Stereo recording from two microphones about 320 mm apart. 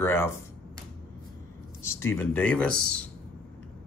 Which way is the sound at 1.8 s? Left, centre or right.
Centre.